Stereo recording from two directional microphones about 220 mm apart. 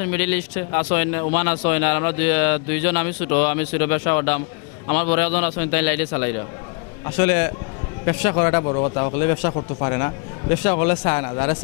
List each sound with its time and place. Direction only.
0.0 s speech: 10° left (ahead or behind)
8.6 s a man's voice: 30° left (ahead or behind)